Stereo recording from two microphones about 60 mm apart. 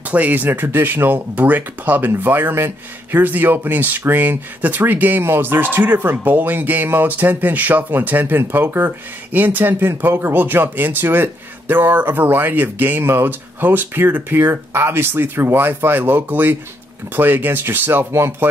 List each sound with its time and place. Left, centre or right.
0.1 s speech: right
18.1 s speech: right